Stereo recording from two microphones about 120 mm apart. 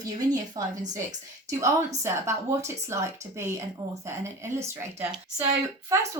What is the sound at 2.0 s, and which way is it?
Speech, 25° right (ahead or behind).